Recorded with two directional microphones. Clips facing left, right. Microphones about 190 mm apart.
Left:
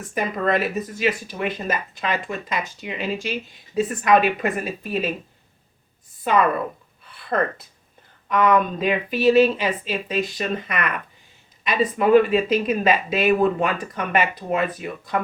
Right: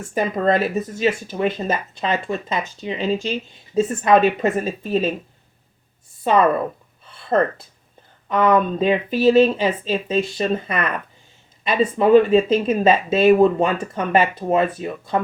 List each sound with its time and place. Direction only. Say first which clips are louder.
0.0 s speech: right 4 dB; 30° right (ahead or behind)
6.2 s speech: right 3 dB; 30° right (ahead or behind)
7.0 s a sound: right 4 dB; 25° right (ahead or behind)
8.3 s speech: right 2 dB; 30° right (ahead or behind)